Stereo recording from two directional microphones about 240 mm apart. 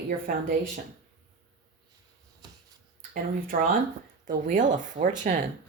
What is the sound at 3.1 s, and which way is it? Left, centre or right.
Speech, right.